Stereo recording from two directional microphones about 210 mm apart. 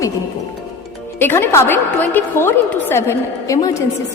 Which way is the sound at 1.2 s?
10° left (ahead or behind).